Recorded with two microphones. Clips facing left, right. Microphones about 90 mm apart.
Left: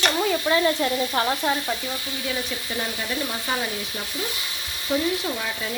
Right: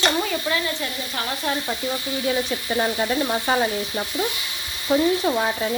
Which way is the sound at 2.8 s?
45° right (ahead or behind).